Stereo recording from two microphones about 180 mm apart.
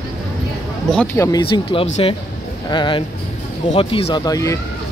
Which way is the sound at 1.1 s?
15° left (ahead or behind).